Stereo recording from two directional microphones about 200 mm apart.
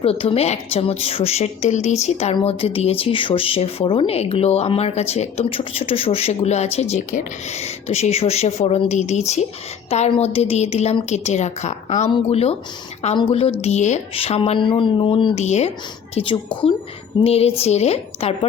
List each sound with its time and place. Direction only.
0.0 s a woman's voice: 30° left (ahead or behind)